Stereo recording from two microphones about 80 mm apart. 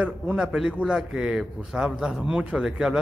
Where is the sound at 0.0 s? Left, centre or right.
Centre.